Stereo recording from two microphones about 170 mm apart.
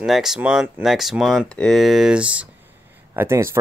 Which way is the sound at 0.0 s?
Centre (ahead or behind).